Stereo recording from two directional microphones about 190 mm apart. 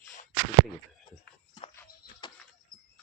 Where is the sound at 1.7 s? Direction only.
25° left (ahead or behind).